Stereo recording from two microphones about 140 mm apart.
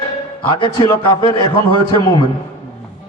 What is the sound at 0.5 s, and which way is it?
A man's voice, 40° left (ahead or behind).